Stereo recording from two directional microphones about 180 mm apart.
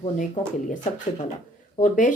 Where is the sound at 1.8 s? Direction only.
45° left (ahead or behind).